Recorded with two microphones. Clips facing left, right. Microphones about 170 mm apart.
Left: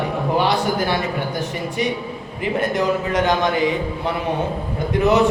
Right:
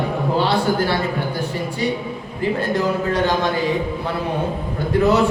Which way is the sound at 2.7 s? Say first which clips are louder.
Even; 20° left (ahead or behind).